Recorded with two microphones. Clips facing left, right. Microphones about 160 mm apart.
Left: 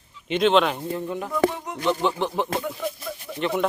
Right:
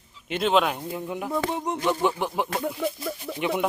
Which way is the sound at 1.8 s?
15° right (ahead or behind).